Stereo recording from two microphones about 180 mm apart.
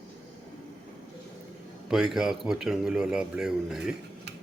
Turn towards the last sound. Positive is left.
turn(degrees=-5)  # may be behind; listen again after turning